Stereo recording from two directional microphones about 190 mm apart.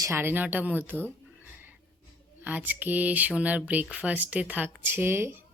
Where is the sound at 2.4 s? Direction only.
10° right (ahead or behind).